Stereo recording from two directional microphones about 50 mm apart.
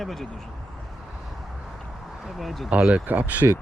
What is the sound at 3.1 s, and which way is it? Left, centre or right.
Speech, right.